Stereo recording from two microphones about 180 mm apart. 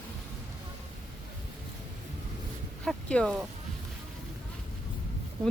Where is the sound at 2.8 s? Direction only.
5° left (ahead or behind).